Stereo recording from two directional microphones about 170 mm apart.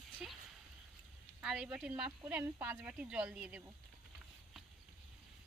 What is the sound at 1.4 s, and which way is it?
Speech, 5° right (ahead or behind).